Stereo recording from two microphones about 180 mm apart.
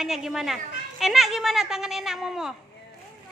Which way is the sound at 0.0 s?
Centre (ahead or behind).